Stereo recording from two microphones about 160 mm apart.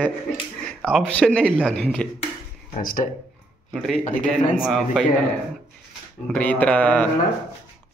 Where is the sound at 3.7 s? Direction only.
Centre (ahead or behind).